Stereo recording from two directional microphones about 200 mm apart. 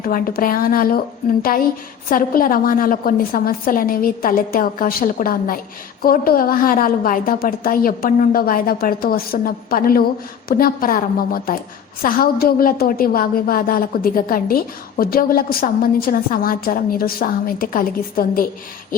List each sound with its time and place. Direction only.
0.0 s a woman's voice: 45° left (ahead or behind)